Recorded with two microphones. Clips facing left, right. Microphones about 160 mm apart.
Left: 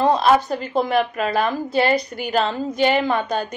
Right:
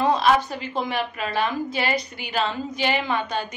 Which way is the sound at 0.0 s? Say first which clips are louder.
Left 3 dB; 35° left (ahead or behind).